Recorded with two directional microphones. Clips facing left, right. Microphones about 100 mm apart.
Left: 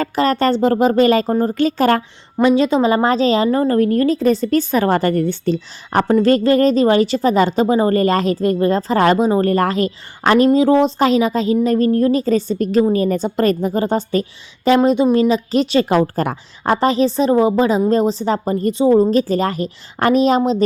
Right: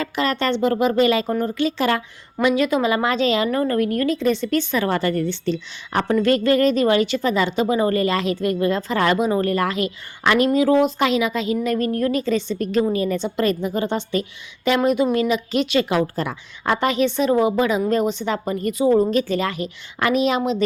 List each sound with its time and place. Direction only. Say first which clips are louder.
0.0 s speech: left 6 dB; 40° left (ahead or behind)
14.8 s speech: left 4 dB; 25° left (ahead or behind)
19.1 s speech: left 4 dB; 40° left (ahead or behind)